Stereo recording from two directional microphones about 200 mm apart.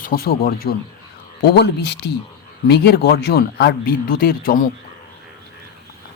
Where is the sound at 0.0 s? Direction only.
45° left (ahead or behind).